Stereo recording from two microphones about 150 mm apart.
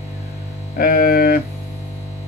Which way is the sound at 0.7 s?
70° left (ahead or behind).